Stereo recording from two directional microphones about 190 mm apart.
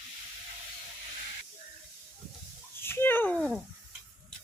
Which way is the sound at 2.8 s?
10° left (ahead or behind).